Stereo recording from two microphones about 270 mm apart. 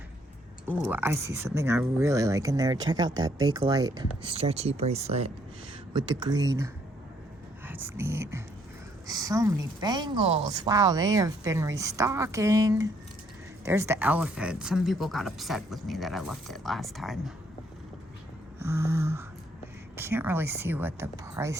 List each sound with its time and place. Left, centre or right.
0.6 s a woman's voice: centre
7.7 s a woman's voice: centre
18.6 s a woman's voice: centre